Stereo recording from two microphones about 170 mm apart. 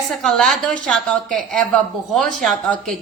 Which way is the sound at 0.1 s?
Centre (ahead or behind).